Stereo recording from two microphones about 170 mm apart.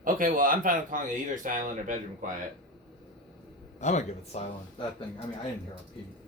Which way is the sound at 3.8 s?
45° left (ahead or behind).